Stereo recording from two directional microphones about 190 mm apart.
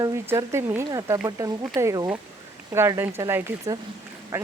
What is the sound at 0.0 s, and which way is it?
Speech, 15° right (ahead or behind).